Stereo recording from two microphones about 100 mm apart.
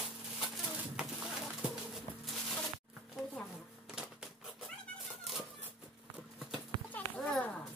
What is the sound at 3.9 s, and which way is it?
Typewriter, 5° right (ahead or behind).